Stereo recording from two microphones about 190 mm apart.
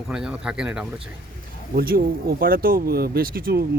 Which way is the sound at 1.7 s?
50° right (ahead or behind).